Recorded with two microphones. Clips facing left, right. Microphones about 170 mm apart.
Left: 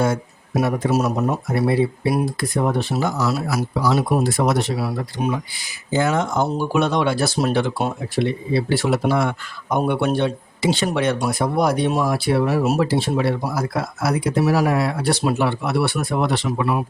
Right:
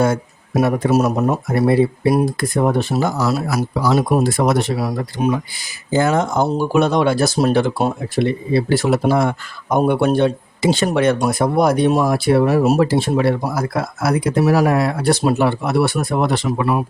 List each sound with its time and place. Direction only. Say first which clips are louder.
0.0 s speech: right 3 dB; 50° right (ahead or behind)